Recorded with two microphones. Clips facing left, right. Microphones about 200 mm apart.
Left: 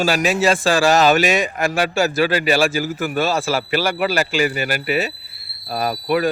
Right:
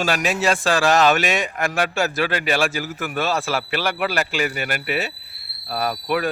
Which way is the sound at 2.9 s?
35° left (ahead or behind).